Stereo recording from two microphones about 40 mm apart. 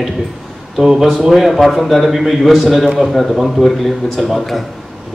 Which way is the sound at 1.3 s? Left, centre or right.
Centre.